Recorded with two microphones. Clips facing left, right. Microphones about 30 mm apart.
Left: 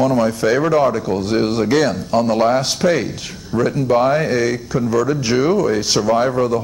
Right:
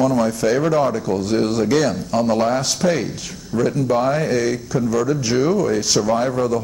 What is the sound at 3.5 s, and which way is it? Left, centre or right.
Speech, left.